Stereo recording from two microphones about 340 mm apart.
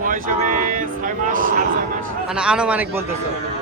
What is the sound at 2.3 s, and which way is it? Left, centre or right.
Speech, centre.